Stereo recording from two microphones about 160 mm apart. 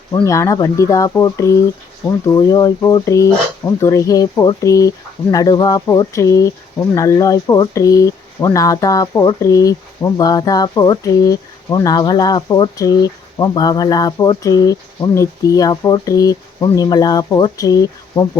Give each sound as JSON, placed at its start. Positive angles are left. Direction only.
{"t": 0.3, "sound": "speech", "side_deg": 20}